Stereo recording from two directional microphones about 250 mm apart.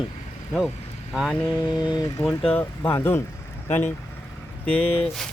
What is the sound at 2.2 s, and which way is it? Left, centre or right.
Speech, centre.